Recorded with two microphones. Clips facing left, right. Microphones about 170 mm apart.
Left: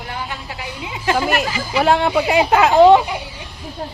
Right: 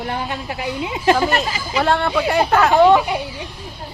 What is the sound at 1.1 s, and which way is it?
Speech, 15° left (ahead or behind).